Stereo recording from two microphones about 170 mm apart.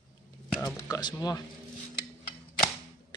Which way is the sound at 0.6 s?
25° left (ahead or behind).